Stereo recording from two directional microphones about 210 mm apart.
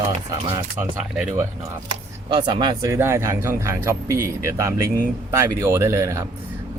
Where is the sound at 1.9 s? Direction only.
20° right (ahead or behind).